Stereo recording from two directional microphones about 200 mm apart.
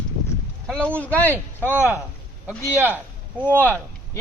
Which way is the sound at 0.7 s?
5° left (ahead or behind).